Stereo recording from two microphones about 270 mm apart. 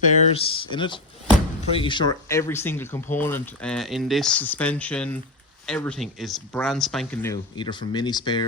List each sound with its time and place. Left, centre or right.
0.0 s speech: left